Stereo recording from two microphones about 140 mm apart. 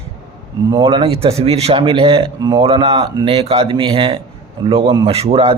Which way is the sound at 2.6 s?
40° right (ahead or behind).